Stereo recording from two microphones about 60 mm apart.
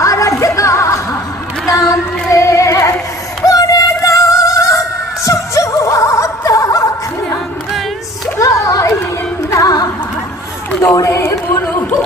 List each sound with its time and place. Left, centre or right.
0.0 s music: left
1.7 s female singing: left
3.4 s music: left
8.4 s a sound: left
9.5 s singing: left
11.0 s a sound: left